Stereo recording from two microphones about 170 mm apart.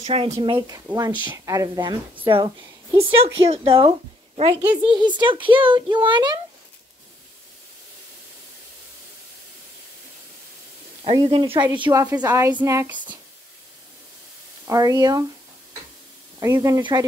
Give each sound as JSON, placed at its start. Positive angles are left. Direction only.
{"t": 0.0, "sound": "a woman's voice", "side_deg": -35}
{"t": 4.6, "sound": "speech", "side_deg": -10}
{"t": 4.9, "sound": "a child's voice", "side_deg": -25}
{"t": 11.1, "sound": "a woman's voice", "side_deg": -30}
{"t": 14.7, "sound": "a child's voice", "side_deg": -20}
{"t": 16.3, "sound": "a child's voice", "side_deg": -20}